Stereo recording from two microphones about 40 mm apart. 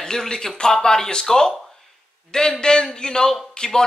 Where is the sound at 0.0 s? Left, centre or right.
Centre.